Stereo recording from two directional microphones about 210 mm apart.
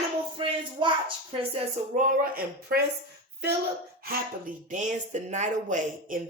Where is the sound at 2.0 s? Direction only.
45° right (ahead or behind).